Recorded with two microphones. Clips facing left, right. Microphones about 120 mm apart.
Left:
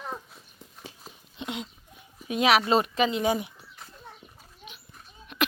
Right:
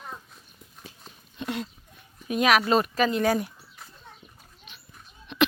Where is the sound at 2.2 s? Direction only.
25° left (ahead or behind).